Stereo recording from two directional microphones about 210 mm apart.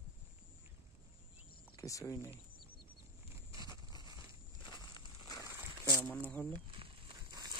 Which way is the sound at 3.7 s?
20° left (ahead or behind).